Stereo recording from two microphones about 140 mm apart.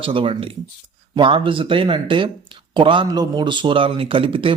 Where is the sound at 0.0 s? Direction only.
40° right (ahead or behind).